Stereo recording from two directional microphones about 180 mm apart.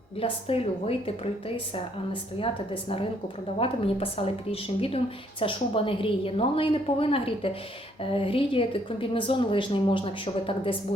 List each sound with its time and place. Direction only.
0.2 s a woman's voice: 30° left (ahead or behind)
3.6 s a woman's voice: 30° left (ahead or behind)